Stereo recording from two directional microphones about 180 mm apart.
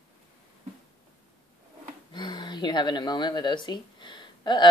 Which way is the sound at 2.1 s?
25° left (ahead or behind).